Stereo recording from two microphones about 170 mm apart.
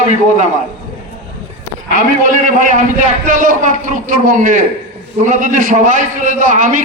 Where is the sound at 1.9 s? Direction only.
55° right (ahead or behind).